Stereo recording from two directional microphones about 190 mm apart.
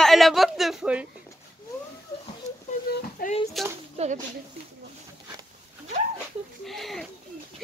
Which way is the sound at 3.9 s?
35° right (ahead or behind).